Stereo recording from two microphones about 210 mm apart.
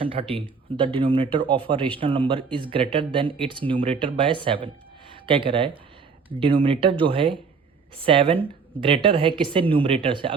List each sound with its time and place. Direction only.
0.0 s speech: 25° right (ahead or behind)